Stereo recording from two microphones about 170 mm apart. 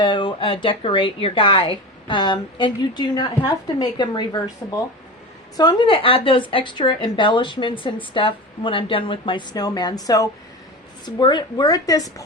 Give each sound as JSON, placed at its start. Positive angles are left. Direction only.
{"t": 0.0, "sound": "a woman's voice", "side_deg": 30}